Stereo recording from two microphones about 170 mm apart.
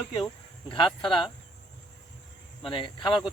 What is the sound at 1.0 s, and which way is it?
Speech, 30° left (ahead or behind).